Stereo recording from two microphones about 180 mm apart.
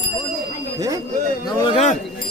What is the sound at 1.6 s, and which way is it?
Speech, 30° left (ahead or behind).